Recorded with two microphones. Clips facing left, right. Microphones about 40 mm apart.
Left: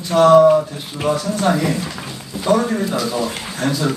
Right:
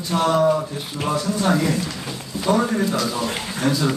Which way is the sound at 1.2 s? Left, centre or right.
Centre.